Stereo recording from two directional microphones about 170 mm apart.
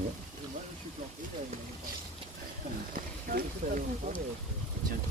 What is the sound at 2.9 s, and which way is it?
Speech, 55° right (ahead or behind).